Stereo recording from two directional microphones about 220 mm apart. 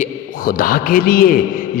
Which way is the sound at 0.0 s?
40° left (ahead or behind).